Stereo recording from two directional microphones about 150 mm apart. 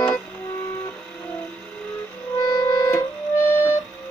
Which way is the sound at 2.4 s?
20° left (ahead or behind).